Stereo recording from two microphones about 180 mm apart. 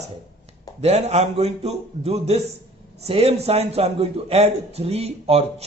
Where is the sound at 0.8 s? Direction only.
35° right (ahead or behind).